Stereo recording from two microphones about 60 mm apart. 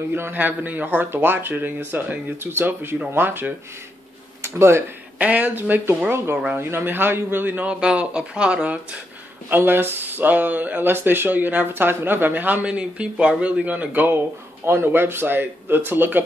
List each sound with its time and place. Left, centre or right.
0.1 s speech: right
5.2 s speech: right
6.3 s speech: right
6.6 s speech: right
7.6 s speech: centre
9.5 s speech: right
12.6 s speech: centre; by 16.3 s right